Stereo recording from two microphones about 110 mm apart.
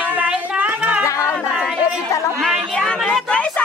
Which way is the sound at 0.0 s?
15° right (ahead or behind).